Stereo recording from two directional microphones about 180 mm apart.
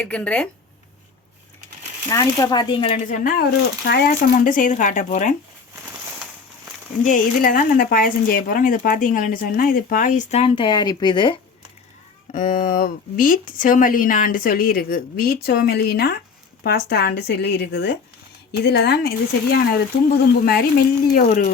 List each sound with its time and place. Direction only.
0.0 s speech: 5° left (ahead or behind)
2.0 s speech: 20° left (ahead or behind)
3.0 s speech: 50° left (ahead or behind)
7.0 s speech: 50° left (ahead or behind); by 11.3 s 25° left (ahead or behind)
12.3 s speech: 50° left (ahead or behind)